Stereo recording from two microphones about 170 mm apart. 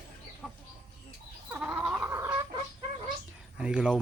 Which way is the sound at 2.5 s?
35° right (ahead or behind).